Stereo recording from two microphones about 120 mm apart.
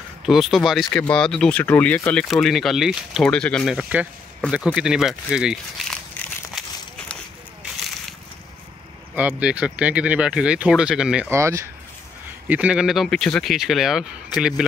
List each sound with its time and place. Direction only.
0.2 s speech: centre (ahead or behind)
3.7 s speech: 10° right (ahead or behind)
9.1 s speech: 15° right (ahead or behind)
11.2 s speech: 25° right (ahead or behind)
12.4 s speech: 10° right (ahead or behind)